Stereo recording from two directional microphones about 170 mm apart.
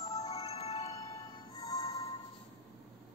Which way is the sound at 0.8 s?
20° left (ahead or behind).